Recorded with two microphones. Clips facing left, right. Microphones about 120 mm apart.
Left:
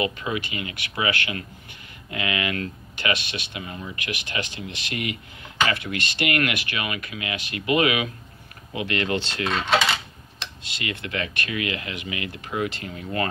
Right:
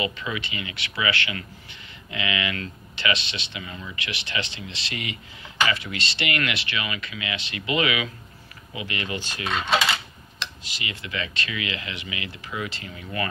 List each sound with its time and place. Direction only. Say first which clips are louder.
0.0 s speech: left 3 dB; 50° left (ahead or behind)
8.7 s speech: left 6 dB; 65° left (ahead or behind)
10.6 s speech: left 4 dB; 60° left (ahead or behind)